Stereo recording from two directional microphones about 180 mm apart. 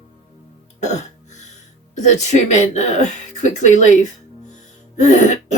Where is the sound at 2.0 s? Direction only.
40° left (ahead or behind).